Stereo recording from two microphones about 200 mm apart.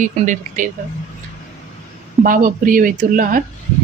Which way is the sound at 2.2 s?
45° right (ahead or behind).